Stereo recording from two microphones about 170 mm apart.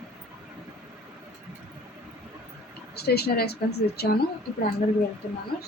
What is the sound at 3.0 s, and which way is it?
Speech, 70° left (ahead or behind).